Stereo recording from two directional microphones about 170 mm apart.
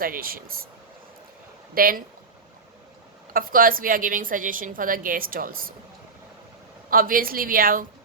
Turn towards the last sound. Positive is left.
turn(degrees=-55)  # may be behind; listen again after turning